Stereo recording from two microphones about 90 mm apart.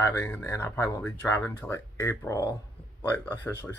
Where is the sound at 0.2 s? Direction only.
25° left (ahead or behind).